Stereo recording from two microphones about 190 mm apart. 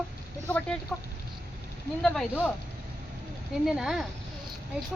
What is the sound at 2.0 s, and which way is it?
Speech, 5° left (ahead or behind).